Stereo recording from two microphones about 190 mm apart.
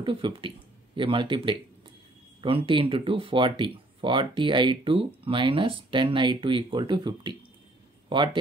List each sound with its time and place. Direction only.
0.0 s speech: 25° right (ahead or behind)